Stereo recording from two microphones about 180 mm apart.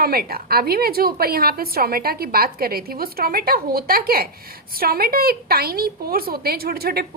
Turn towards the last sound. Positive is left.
turn(degrees=-60)  # may be behind; listen again after turning